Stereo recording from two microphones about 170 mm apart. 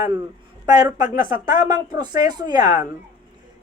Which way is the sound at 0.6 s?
25° right (ahead or behind).